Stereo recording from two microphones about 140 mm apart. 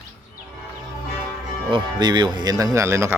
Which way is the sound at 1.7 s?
35° right (ahead or behind).